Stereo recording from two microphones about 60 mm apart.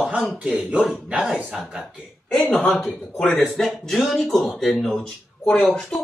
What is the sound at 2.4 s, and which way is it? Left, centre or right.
Speech, left.